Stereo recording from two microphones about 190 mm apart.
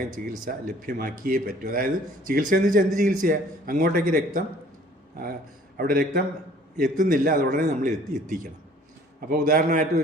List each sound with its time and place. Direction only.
0.4 s speech: 45° right (ahead or behind)
5.7 s speech: 50° right (ahead or behind)